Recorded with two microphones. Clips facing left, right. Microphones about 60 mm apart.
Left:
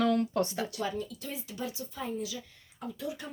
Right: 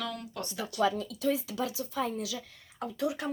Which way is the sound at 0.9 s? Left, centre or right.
Right.